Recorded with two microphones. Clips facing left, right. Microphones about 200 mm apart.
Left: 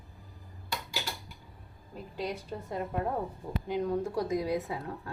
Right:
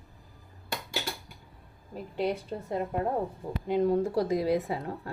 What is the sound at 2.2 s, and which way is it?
A woman's voice, 25° right (ahead or behind).